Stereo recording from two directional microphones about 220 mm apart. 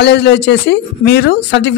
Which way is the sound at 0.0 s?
50° left (ahead or behind).